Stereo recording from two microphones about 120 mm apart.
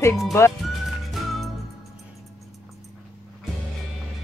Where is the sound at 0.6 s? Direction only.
Centre (ahead or behind).